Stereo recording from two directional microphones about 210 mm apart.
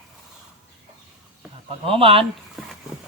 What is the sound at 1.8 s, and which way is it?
Speech, 25° right (ahead or behind).